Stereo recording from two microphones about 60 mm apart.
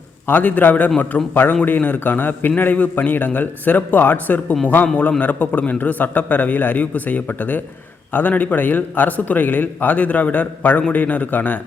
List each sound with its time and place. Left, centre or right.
0.3 s a man's voice: left